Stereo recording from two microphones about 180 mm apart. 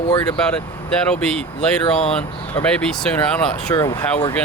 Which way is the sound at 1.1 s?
5° left (ahead or behind).